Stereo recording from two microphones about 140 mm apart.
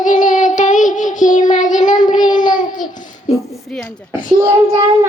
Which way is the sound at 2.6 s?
70° left (ahead or behind).